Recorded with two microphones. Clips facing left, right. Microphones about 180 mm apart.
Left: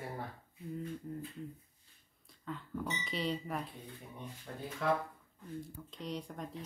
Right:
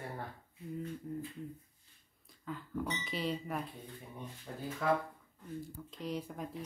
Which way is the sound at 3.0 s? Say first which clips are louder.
Even; centre (ahead or behind).